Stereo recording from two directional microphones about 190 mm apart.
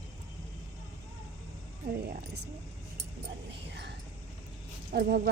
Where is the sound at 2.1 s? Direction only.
55° right (ahead or behind).